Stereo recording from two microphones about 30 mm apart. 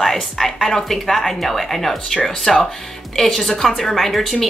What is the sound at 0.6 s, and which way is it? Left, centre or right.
A woman's voice, centre.